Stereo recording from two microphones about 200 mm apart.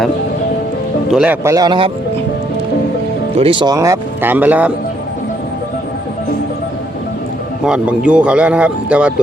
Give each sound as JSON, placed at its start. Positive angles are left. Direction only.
{"t": 1.1, "sound": "speech", "side_deg": -5}
{"t": 1.5, "sound": "speech", "side_deg": -20}
{"t": 3.3, "sound": "speech", "side_deg": -25}
{"t": 7.6, "sound": "speech", "side_deg": -5}